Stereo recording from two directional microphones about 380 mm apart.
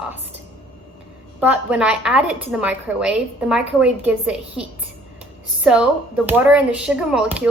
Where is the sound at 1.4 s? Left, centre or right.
Centre.